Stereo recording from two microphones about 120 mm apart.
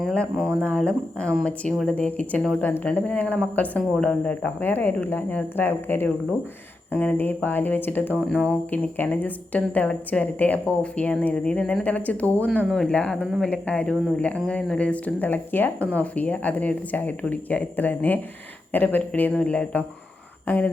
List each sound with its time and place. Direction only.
0.0 s speech: centre (ahead or behind)
13.2 s speech: 5° right (ahead or behind)
13.5 s speech: 10° left (ahead or behind)